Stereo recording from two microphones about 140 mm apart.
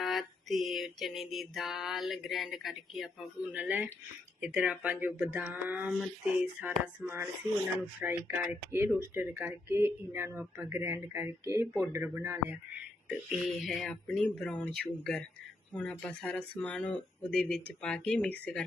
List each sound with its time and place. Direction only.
0.0 s mantra: centre (ahead or behind)
4.4 s speech: 10° right (ahead or behind)
13.1 s mantra: centre (ahead or behind)
15.7 s speech: 10° left (ahead or behind)